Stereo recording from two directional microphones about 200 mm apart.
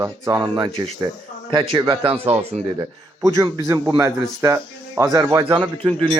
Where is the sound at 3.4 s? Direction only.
15° right (ahead or behind).